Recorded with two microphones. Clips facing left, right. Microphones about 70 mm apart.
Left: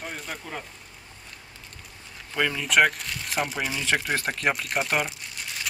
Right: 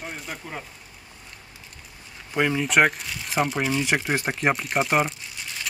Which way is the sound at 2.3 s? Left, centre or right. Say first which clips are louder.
Right 3 dB; centre.